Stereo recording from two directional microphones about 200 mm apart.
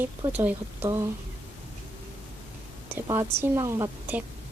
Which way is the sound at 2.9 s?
10° right (ahead or behind).